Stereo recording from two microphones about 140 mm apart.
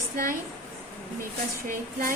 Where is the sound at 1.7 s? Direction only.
75° right (ahead or behind).